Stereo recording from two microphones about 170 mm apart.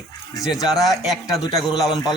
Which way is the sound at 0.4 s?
Centre (ahead or behind).